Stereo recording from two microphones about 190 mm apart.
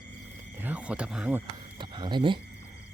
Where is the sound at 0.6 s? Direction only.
5° right (ahead or behind).